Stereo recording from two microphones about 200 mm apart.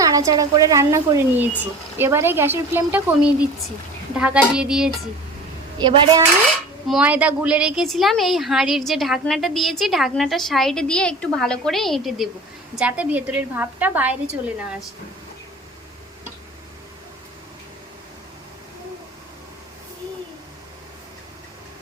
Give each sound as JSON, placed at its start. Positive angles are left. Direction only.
{"t": 0.0, "sound": "a woman's voice", "side_deg": -15}
{"t": 4.1, "sound": "a woman's voice", "side_deg": -5}
{"t": 5.8, "sound": "speech", "side_deg": -20}
{"t": 6.8, "sound": "a woman's voice", "side_deg": -5}